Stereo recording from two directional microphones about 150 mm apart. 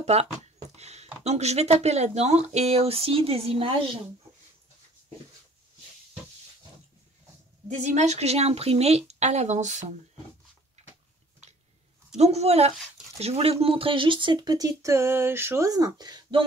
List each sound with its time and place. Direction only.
0.0 s speech: 45° right (ahead or behind)
7.6 s speech: 50° right (ahead or behind)
10.8 s a sound: 50° right (ahead or behind)
12.2 s speech: 45° right (ahead or behind)